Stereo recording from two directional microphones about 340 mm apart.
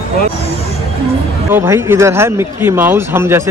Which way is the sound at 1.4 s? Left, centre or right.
Centre.